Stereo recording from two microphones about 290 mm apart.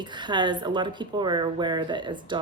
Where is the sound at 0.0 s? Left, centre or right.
Centre.